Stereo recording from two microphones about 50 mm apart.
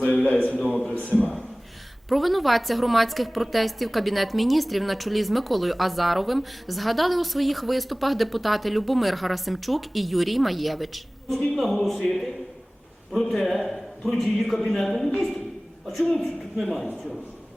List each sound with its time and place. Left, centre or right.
0.3 s a man's voice: left
2.0 s a woman's voice: centre